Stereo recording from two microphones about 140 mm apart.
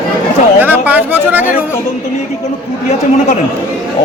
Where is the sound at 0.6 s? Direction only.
10° right (ahead or behind).